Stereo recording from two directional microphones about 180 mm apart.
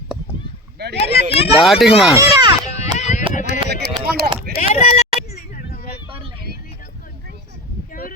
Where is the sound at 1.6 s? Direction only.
Centre (ahead or behind).